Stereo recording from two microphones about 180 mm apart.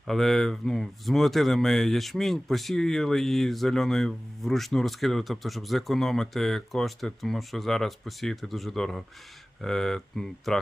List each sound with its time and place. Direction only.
0.1 s speech: centre (ahead or behind)